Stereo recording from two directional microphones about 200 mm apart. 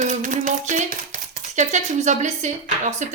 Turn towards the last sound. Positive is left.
turn(degrees=-35)  # may be behind; listen again after turning